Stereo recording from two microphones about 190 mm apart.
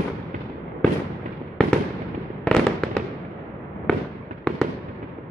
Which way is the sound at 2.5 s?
Centre (ahead or behind).